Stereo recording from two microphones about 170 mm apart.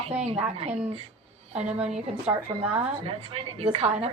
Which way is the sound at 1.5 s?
40° right (ahead or behind).